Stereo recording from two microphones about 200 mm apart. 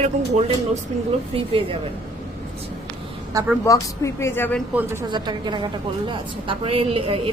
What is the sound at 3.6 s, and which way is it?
Speech, 15° left (ahead or behind).